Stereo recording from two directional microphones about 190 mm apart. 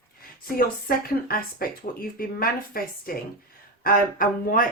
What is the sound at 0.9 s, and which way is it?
Speech, 50° left (ahead or behind).